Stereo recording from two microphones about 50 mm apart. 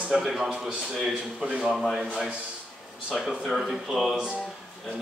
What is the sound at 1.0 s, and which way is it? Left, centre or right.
A man's voice, centre.